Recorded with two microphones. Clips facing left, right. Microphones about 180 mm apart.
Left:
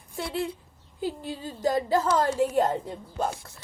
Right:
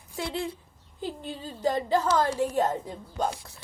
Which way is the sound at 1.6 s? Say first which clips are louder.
Left 1 dB; 45° left (ahead or behind).